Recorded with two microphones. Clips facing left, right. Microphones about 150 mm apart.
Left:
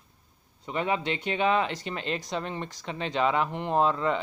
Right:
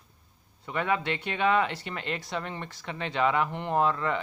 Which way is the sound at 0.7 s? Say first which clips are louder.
Even; 20° left (ahead or behind).